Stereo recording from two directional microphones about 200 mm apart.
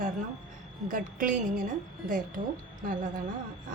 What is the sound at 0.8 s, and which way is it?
Speech, 40° right (ahead or behind).